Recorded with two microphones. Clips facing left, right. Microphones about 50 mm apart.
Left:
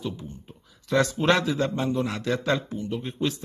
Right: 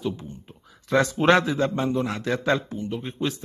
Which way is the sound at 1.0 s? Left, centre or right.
Right.